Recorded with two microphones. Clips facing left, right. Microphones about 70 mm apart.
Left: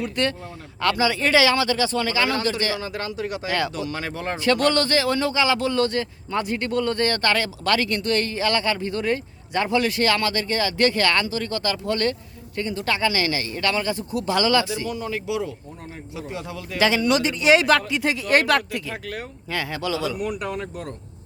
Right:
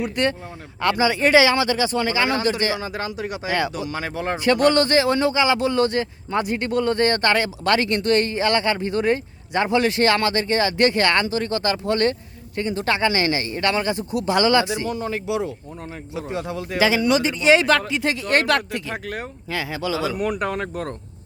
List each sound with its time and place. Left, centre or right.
0.0 s speech: right
16.7 s speech: centre
19.0 s speech: right
19.5 s speech: centre
20.1 s speech: right